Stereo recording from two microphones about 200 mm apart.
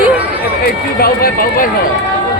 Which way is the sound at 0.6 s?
50° left (ahead or behind).